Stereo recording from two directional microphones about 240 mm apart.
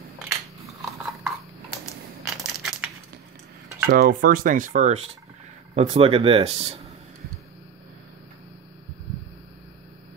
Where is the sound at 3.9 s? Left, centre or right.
Right.